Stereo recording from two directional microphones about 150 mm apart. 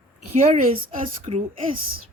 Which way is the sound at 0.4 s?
45° right (ahead or behind).